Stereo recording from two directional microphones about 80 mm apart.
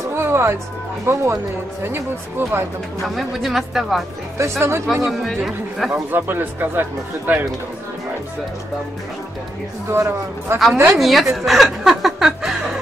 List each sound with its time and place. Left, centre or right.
0.0 s music: right
1.0 s speech: right
3.0 s speech: centre
4.4 s speech: right
5.0 s speech: centre
5.9 s speech: right
9.8 s speech: right
11.0 s speech: centre